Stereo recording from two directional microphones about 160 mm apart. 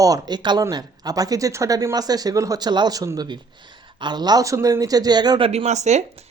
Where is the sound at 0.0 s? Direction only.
20° right (ahead or behind).